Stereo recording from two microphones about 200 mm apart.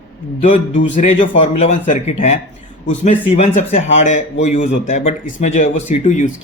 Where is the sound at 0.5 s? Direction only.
40° left (ahead or behind).